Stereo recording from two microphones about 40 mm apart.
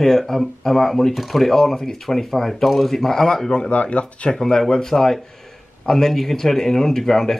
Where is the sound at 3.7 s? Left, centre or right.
Left.